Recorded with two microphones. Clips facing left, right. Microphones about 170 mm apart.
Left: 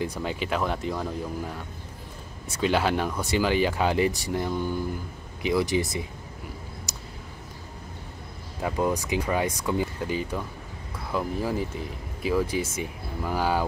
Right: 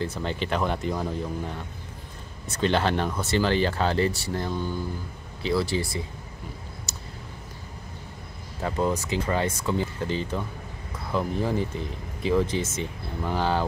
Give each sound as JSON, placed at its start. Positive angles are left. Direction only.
{"t": 0.0, "sound": "speech", "side_deg": 10}
{"t": 6.9, "sound": "a sound", "side_deg": 15}
{"t": 8.6, "sound": "speech", "side_deg": 10}